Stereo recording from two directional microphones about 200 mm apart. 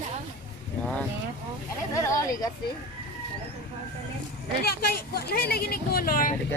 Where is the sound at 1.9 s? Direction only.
15° left (ahead or behind).